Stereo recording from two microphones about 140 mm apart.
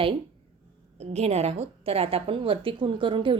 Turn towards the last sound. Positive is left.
turn(degrees=-35)  # may be behind; listen again after turning